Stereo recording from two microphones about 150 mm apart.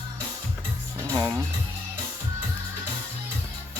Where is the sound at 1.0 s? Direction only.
25° right (ahead or behind).